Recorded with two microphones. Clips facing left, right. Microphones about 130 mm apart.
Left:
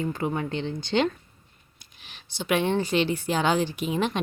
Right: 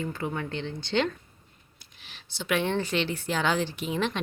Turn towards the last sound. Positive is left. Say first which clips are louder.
# left 3 dB
turn(degrees=15)  # may be behind; listen again after turning